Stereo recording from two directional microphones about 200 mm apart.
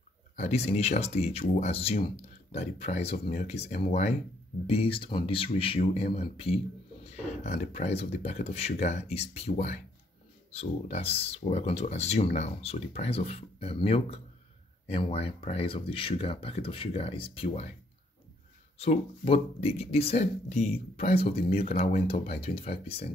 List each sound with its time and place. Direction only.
0.4 s speech: 30° left (ahead or behind)
7.7 s speech: 30° left (ahead or behind)
18.8 s speech: 30° left (ahead or behind)